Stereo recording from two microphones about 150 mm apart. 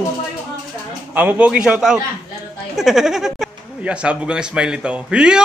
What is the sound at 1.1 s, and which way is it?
A man's voice, 10° right (ahead or behind).